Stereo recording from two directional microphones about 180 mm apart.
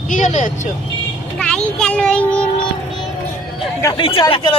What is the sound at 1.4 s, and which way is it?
A child's voice, 5° left (ahead or behind).